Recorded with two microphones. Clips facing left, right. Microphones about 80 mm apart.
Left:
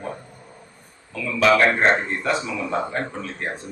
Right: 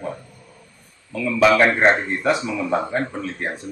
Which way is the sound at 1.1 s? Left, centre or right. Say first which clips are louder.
Right 2 dB; centre.